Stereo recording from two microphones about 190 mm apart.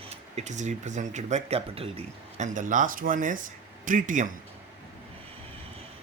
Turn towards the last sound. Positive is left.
turn(degrees=-45)  # may be behind; listen again after turning